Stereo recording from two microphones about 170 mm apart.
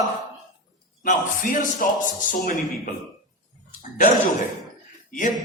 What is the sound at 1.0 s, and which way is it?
A man's voice, 50° left (ahead or behind).